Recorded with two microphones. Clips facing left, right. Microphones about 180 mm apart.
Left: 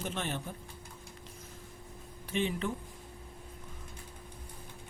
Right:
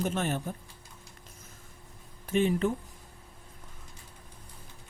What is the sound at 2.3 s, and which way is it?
Speech, 45° right (ahead or behind).